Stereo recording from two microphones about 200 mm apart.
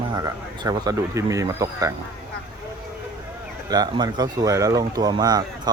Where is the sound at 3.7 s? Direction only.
20° right (ahead or behind).